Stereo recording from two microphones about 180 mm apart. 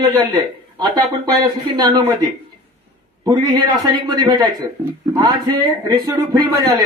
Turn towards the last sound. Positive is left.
turn(degrees=-20)  # may be behind; listen again after turning